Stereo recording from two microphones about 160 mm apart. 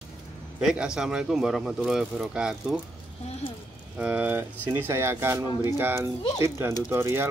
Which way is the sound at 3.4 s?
35° left (ahead or behind).